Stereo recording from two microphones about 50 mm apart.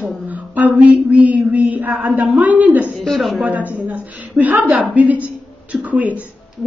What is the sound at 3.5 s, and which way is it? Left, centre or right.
A woman's voice, right.